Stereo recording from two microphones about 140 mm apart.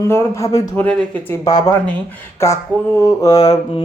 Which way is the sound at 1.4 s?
30° left (ahead or behind).